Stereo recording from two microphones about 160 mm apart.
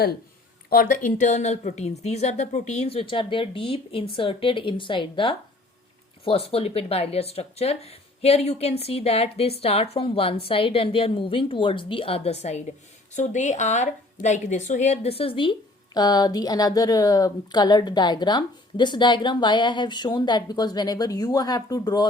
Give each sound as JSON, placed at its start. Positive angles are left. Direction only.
{"t": 0.7, "sound": "a woman's voice", "side_deg": 65}